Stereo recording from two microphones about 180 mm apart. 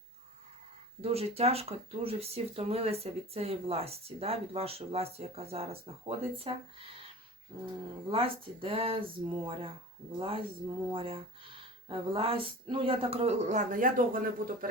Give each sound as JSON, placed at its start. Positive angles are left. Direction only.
{"t": 1.0, "sound": "speech", "side_deg": -35}
{"t": 8.1, "sound": "speech", "side_deg": -30}